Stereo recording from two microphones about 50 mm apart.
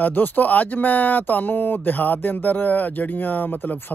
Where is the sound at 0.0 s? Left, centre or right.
Left.